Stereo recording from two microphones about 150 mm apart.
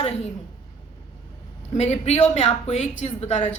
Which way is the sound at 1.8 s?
45° left (ahead or behind).